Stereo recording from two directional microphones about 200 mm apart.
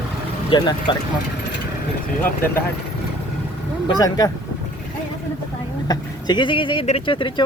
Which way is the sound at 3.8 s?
20° left (ahead or behind).